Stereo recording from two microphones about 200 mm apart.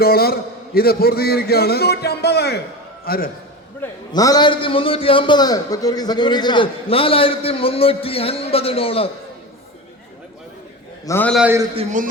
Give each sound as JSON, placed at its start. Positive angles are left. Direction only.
{"t": 0.0, "sound": "a man's voice", "side_deg": 50}
{"t": 4.1, "sound": "a man's voice", "side_deg": 20}
{"t": 11.0, "sound": "a man's voice", "side_deg": 10}
{"t": 11.3, "sound": "a man's voice", "side_deg": -10}
{"t": 11.7, "sound": "a man's voice", "side_deg": -30}